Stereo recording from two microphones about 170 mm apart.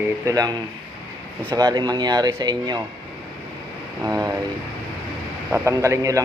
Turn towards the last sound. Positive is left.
turn(degrees=-20)  # may be behind; listen again after turning